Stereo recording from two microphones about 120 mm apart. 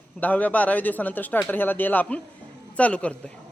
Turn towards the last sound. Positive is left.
turn(degrees=10)  # may be behind; listen again after turning